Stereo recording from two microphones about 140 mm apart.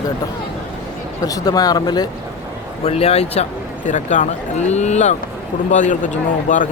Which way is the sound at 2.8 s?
45° left (ahead or behind).